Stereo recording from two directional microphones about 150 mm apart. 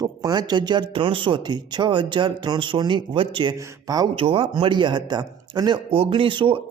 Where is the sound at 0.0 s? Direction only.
25° right (ahead or behind).